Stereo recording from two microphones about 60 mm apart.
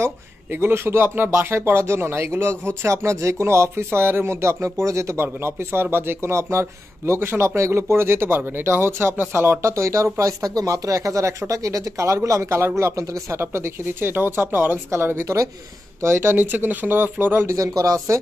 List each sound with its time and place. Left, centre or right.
0.0 s speech: right
10.4 s speech: right
17.5 s speech: right